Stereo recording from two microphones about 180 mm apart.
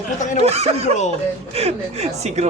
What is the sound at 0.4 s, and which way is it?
Speech, 35° right (ahead or behind).